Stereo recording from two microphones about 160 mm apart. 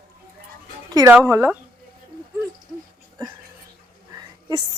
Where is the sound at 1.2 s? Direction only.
15° right (ahead or behind).